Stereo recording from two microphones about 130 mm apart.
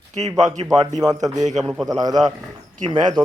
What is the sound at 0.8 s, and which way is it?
A man's voice, 30° right (ahead or behind).